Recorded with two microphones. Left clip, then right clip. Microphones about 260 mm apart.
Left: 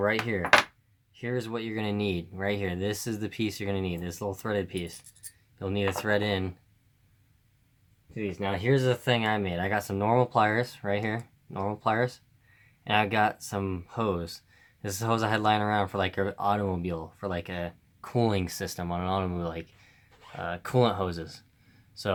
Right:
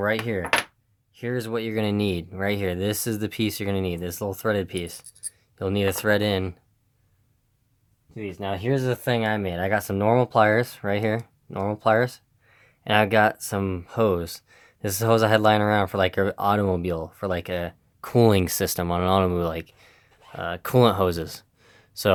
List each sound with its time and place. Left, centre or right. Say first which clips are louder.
1.1 s speech: right 5 dB; right
8.1 s speech: right 1 dB; right